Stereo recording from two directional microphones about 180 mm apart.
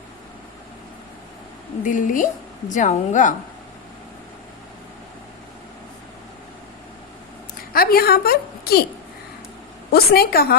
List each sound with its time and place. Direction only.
1.8 s a woman's voice: 45° left (ahead or behind)
7.7 s a woman's voice: 55° left (ahead or behind)
9.9 s a woman's voice: 60° left (ahead or behind)